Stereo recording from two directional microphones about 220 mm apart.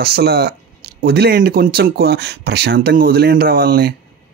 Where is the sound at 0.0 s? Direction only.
45° right (ahead or behind).